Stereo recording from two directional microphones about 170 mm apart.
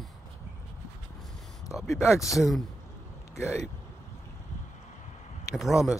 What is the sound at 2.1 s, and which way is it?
Speech, 20° left (ahead or behind).